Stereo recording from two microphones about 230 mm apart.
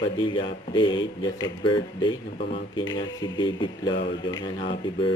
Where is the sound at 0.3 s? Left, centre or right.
Left.